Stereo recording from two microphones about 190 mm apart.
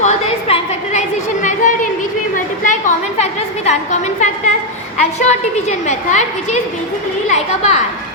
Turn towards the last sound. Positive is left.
turn(degrees=35)  # may be behind; listen again after turning